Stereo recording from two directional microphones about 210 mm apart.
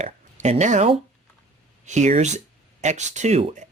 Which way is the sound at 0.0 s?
35° right (ahead or behind).